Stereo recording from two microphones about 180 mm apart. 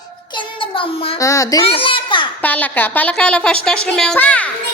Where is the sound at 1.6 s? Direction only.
30° left (ahead or behind).